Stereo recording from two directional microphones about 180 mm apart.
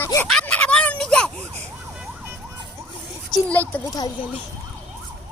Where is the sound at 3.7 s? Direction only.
10° left (ahead or behind).